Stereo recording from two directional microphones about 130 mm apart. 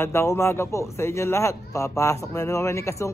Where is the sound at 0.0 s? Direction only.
20° left (ahead or behind).